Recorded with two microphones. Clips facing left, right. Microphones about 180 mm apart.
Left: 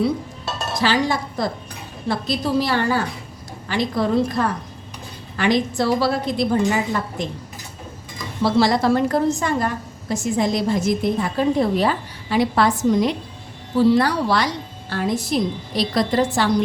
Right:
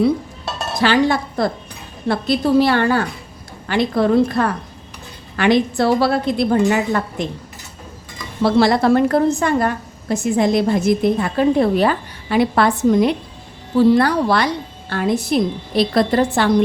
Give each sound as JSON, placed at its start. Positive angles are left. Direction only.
{"t": 0.8, "sound": "a woman's voice", "side_deg": -60}
{"t": 8.4, "sound": "a woman's voice", "side_deg": -60}